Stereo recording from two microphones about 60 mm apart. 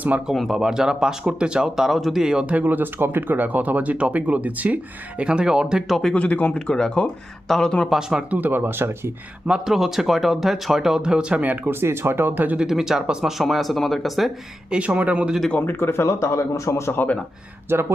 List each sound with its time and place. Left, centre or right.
0.3 s speech: centre
2.5 s speech: right; by 5.8 s centre
5.9 s speech: centre
6.1 s speech: left
6.7 s speech: centre
7.9 s speech: centre
8.3 s speech: right
9.5 s speech: centre; by 11.7 s right
11.7 s speech: right
12.5 s speech: centre
14.7 s speech: right
15.5 s speech: left
16.0 s a man's voice: left
17.7 s speech: right